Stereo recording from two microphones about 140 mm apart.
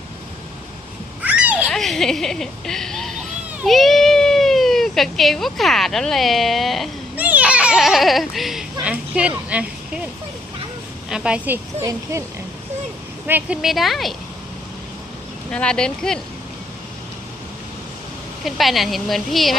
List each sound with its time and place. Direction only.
1.2 s a sound: 10° right (ahead or behind)
1.7 s a woman's voice: centre (ahead or behind)
7.2 s a sound: 10° right (ahead or behind)
11.1 s a woman's voice: 5° right (ahead or behind)
13.6 s a woman's voice: centre (ahead or behind)
15.5 s a woman's voice: 5° left (ahead or behind)
18.4 s a woman's voice: centre (ahead or behind)